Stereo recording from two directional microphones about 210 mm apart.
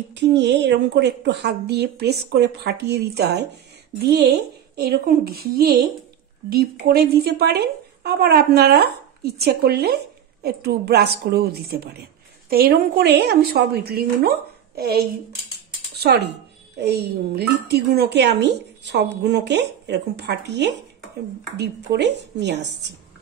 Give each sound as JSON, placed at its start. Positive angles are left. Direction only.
{"t": 0.1, "sound": "a woman's voice", "side_deg": -55}
{"t": 15.9, "sound": "a sound", "side_deg": -50}
{"t": 16.7, "sound": "a woman's voice", "side_deg": -50}